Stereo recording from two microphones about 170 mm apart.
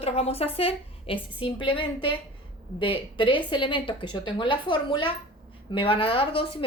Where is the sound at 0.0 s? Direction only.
35° left (ahead or behind).